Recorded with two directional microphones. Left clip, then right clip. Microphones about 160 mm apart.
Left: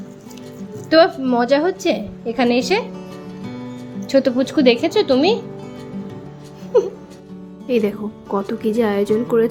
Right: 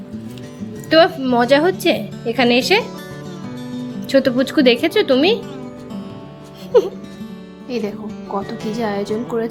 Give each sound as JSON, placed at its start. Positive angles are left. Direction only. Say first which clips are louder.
{"t": 0.9, "sound": "speech", "louder": "even", "side_deg": 0}
{"t": 4.0, "sound": "speech", "louder": "right 1 dB", "side_deg": 5}
{"t": 7.7, "sound": "speech", "louder": "left 5 dB", "side_deg": 20}